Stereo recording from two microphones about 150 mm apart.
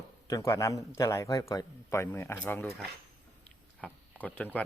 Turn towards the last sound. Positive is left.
turn(degrees=10)  # may be behind; listen again after turning